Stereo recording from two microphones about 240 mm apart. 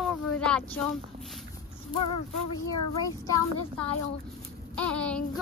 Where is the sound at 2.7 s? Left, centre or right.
Centre.